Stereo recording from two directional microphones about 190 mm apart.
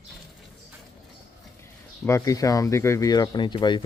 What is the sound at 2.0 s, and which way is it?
Speech, 15° left (ahead or behind).